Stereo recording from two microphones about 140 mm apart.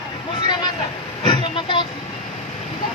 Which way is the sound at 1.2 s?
35° left (ahead or behind).